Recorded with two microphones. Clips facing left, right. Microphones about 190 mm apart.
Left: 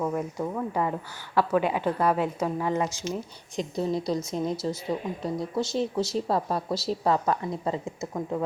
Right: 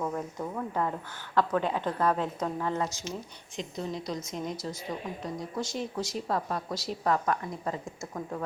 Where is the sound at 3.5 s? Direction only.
35° left (ahead or behind).